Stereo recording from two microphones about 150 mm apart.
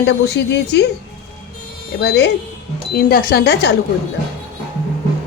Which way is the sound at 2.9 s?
80° left.